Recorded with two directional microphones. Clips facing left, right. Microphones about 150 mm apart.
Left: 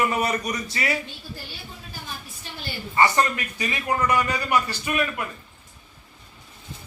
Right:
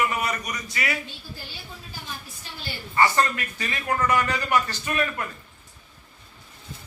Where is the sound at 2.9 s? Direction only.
15° left (ahead or behind).